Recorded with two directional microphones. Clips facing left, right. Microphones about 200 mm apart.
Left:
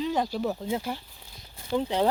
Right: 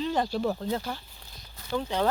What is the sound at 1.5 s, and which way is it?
Speech, 25° left (ahead or behind).